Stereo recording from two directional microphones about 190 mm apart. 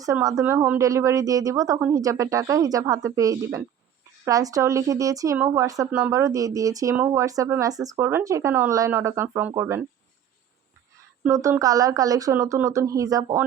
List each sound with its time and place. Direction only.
0.0 s speech: 20° right (ahead or behind)
11.3 s speech: 15° right (ahead or behind)